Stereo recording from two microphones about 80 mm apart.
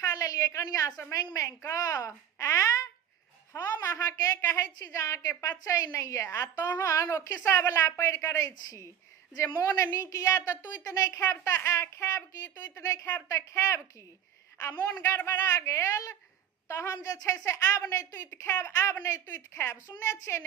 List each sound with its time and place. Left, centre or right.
0.0 s a woman's voice: left
4.4 s a woman's voice: left
12.7 s a woman's voice: left